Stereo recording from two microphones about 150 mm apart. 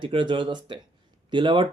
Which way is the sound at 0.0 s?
35° right (ahead or behind).